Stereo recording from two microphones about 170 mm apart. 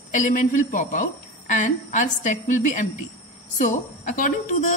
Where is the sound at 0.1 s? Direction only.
50° left (ahead or behind).